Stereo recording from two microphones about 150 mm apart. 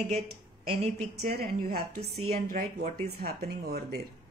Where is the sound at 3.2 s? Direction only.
90° right.